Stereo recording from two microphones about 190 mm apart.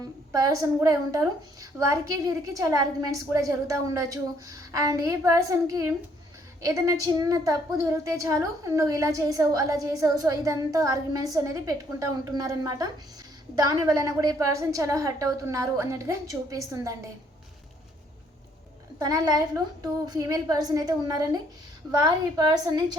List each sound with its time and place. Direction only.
0.0 s a woman's voice: 20° right (ahead or behind)
18.9 s a woman's voice: 20° right (ahead or behind)